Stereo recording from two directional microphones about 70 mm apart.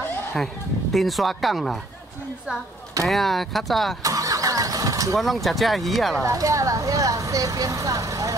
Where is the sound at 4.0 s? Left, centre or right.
Right.